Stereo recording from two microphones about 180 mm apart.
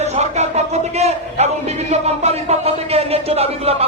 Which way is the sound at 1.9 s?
35° right (ahead or behind).